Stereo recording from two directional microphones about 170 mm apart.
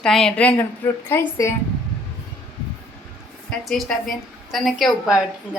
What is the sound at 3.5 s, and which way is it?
A woman's voice, 5° left (ahead or behind).